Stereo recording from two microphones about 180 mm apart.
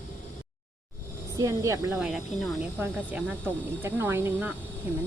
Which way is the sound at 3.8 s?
10° right (ahead or behind).